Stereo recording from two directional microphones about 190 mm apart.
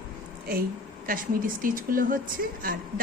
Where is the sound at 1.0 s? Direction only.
45° right (ahead or behind).